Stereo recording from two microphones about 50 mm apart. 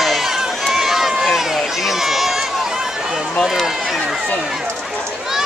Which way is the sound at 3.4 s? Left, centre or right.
Centre.